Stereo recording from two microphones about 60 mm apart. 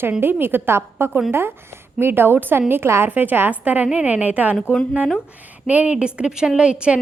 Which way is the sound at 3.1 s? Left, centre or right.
Right.